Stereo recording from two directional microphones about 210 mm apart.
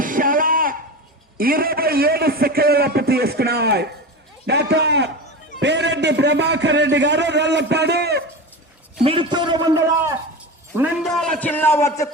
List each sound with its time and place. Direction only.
0.0 s a sound: 40° right (ahead or behind)
1.4 s a man's voice: 45° right (ahead or behind)
9.0 s a man's voice: 25° right (ahead or behind)
10.8 s a man's voice: centre (ahead or behind); by 12.0 s 15° left (ahead or behind)